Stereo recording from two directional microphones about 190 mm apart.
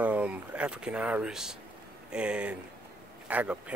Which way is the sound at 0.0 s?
5° right (ahead or behind).